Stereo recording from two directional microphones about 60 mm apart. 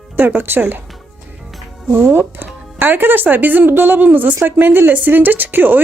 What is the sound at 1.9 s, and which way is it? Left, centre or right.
Speech, right.